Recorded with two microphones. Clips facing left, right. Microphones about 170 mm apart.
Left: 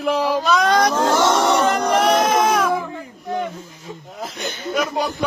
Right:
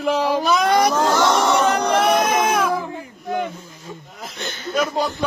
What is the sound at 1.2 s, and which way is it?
Speech, 20° left (ahead or behind).